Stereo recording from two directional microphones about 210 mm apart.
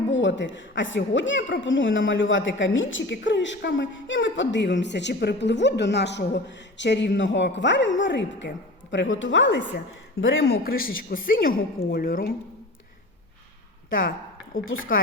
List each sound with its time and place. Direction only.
0.1 s a woman's voice: 60° left (ahead or behind); by 12.3 s 45° left (ahead or behind)
14.6 s speech: 70° left (ahead or behind)